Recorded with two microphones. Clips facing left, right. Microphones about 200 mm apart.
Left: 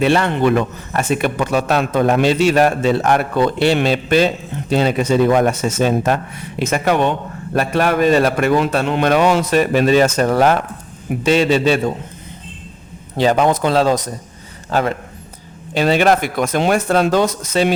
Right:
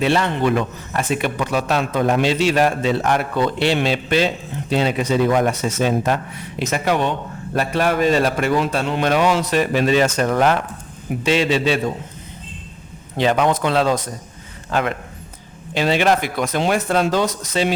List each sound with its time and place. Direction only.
0.0 s a man's voice: 55° left (ahead or behind)
13.1 s a man's voice: 35° left (ahead or behind)
15.7 s a man's voice: 50° left (ahead or behind)